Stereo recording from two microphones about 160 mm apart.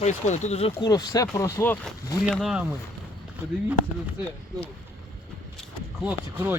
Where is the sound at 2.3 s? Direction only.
Centre (ahead or behind).